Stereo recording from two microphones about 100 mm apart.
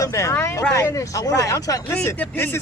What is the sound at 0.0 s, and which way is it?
Speech, 30° left (ahead or behind).